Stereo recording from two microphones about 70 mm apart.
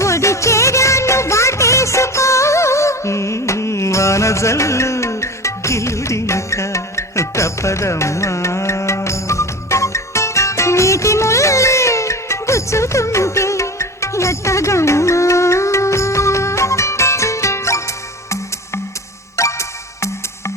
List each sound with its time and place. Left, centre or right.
0.0 s music: left